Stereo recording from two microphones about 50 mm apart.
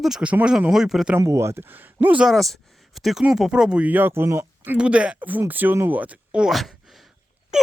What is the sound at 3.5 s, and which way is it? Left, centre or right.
Speech, centre.